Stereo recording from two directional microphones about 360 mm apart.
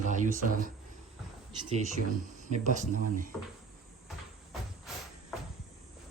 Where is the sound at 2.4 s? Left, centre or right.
Centre.